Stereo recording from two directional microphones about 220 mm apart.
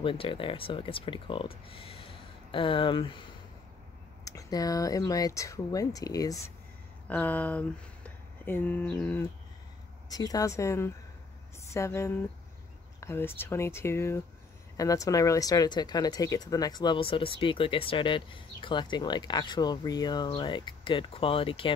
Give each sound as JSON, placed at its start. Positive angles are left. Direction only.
{"t": 0.0, "sound": "speech", "side_deg": 25}
{"t": 4.2, "sound": "speech", "side_deg": 15}